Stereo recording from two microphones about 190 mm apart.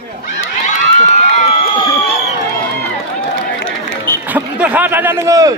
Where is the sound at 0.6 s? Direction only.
40° left (ahead or behind).